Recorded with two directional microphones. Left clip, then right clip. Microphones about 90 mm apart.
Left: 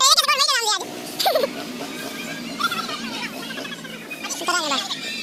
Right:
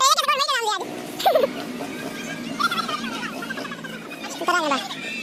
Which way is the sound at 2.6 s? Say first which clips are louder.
Right 1 dB; 15° right (ahead or behind).